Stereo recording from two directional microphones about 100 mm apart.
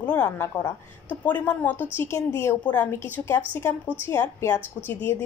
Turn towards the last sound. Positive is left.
turn(degrees=20)  # may be behind; listen again after turning